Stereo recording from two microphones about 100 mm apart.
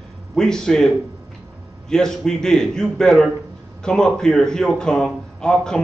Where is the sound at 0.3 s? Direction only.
5° left (ahead or behind).